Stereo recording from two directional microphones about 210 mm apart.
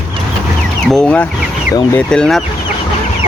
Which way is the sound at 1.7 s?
15° left (ahead or behind).